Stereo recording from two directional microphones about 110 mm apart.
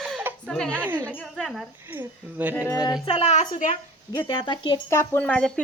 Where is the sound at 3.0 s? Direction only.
65° left (ahead or behind); by 3.6 s 85° left.